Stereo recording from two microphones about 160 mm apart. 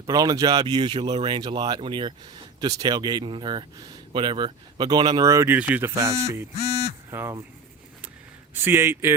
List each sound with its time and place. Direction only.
0.1 s a man's voice: 20° right (ahead or behind)
8.5 s a man's voice: 15° right (ahead or behind)